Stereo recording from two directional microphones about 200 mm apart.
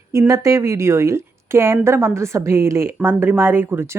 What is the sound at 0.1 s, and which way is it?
A woman's voice, 15° right (ahead or behind).